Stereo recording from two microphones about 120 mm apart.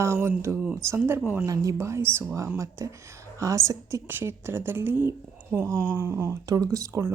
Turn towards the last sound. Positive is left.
turn(degrees=-25)  # may be behind; listen again after turning